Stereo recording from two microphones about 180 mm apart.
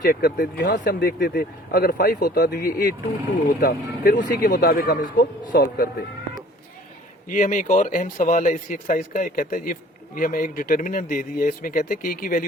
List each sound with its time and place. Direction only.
0.0 s speech: 60° left (ahead or behind)
7.3 s speech: 45° left (ahead or behind)